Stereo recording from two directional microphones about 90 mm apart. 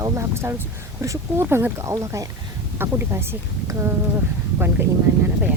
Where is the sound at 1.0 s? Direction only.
30° right (ahead or behind).